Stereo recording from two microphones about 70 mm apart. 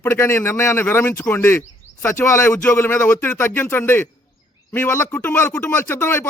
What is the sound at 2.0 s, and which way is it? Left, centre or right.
Speech, left.